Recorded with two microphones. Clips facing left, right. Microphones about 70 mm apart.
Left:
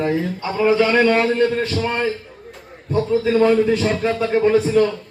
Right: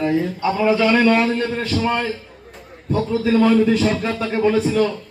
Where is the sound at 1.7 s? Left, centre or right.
Right.